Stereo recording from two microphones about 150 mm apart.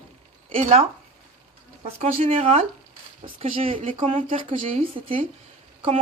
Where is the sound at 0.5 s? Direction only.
45° right (ahead or behind).